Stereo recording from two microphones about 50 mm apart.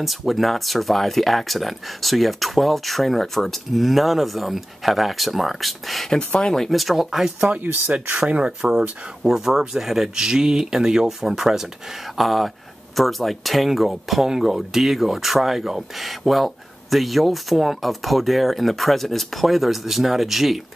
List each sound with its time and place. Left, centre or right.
0.0 s speech: centre
6.0 s speech: centre
6.7 s speech: centre
7.3 s speech: right; by 20.6 s centre